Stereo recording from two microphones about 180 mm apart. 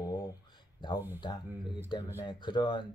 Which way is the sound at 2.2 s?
25° left (ahead or behind).